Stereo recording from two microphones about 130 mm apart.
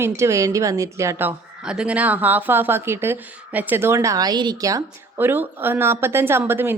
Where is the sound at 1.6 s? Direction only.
5° right (ahead or behind).